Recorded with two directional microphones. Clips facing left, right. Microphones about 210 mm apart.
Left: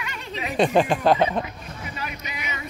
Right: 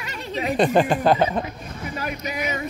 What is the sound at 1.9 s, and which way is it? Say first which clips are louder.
Speech: right 9 dB; 45° right (ahead or behind).